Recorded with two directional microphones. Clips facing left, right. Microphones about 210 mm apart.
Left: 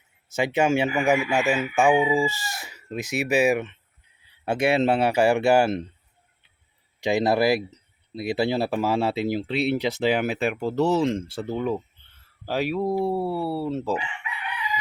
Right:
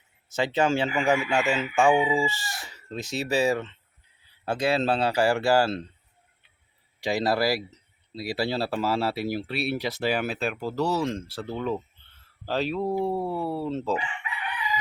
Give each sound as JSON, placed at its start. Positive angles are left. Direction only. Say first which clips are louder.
{"t": 0.3, "sound": "speech", "louder": "left 2 dB", "side_deg": 20}
{"t": 7.0, "sound": "speech", "louder": "left 4 dB", "side_deg": 20}